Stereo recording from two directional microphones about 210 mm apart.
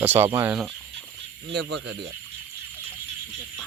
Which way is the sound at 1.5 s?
55° right (ahead or behind).